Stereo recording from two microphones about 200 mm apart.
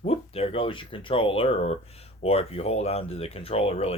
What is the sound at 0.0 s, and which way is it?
Speech, 30° left (ahead or behind).